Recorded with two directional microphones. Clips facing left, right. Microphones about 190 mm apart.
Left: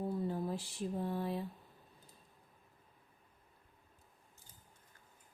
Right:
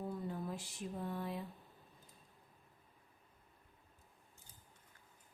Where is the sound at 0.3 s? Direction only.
30° left (ahead or behind).